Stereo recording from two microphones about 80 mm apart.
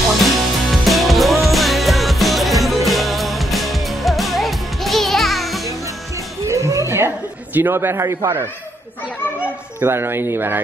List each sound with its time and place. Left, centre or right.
0.2 s music: centre
6.4 s music: right
7.5 s a man's voice: right
9.4 s speech: right